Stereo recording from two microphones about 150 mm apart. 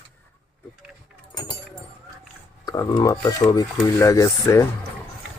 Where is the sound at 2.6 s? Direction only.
20° left (ahead or behind).